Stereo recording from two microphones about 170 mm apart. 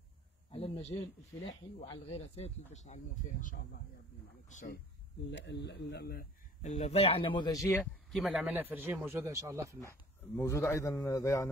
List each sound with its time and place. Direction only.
0.5 s a sound: 35° left (ahead or behind)
1.8 s speech: 35° left (ahead or behind)
5.3 s speech: 90° left; by 6.2 s 70° left (ahead or behind)
6.6 s speech: 45° left (ahead or behind); by 7.8 s 20° left (ahead or behind)
8.3 s a man's voice: 10° right (ahead or behind)
9.8 s speech: 15° left (ahead or behind)